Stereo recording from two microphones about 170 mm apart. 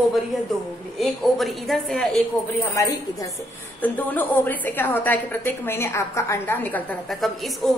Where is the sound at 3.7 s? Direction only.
10° left (ahead or behind).